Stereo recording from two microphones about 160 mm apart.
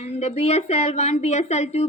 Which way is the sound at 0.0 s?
45° left (ahead or behind).